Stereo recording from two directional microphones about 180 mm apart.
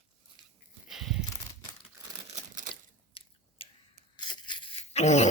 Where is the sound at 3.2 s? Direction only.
30° left (ahead or behind).